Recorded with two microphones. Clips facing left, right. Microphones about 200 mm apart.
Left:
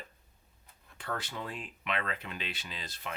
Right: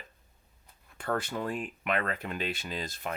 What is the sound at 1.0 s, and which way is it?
Speech, 50° right (ahead or behind).